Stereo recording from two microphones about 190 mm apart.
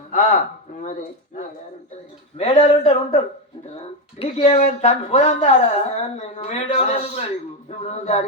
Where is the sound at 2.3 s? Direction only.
30° left (ahead or behind).